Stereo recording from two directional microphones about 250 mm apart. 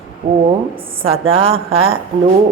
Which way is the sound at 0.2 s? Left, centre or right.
Centre.